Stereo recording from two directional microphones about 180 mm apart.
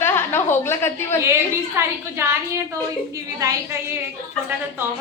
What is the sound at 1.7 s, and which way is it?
Speech, 15° right (ahead or behind).